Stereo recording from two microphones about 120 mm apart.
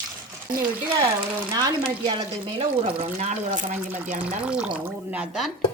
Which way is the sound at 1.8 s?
45° right (ahead or behind).